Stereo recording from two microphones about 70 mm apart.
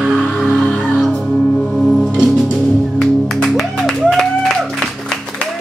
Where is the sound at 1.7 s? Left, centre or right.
Centre.